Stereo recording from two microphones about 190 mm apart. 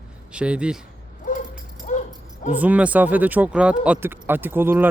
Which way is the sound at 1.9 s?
40° left (ahead or behind).